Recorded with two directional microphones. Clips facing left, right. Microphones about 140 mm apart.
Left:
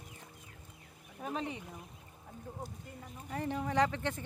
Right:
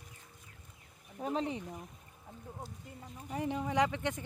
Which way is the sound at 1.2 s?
30° right (ahead or behind).